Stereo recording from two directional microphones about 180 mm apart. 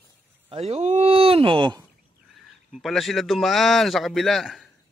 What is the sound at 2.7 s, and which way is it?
A man's voice, centre (ahead or behind).